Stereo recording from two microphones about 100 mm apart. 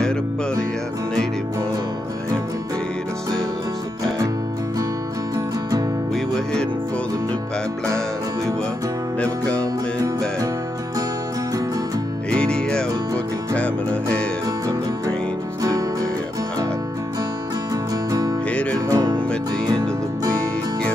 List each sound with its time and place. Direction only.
6.1 s music: 5° left (ahead or behind)
9.2 s music: 10° left (ahead or behind)
12.3 s music: 10° left (ahead or behind)
15.6 s music: 35° right (ahead or behind)
18.5 s music: 10° left (ahead or behind)
18.9 s music: 35° right (ahead or behind)
19.1 s music: 50° right (ahead or behind)